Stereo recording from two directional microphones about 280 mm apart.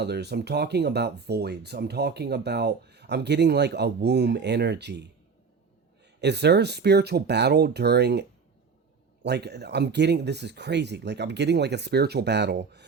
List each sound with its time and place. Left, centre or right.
0.0 s speech: right
6.1 s speech: right
9.2 s speech: right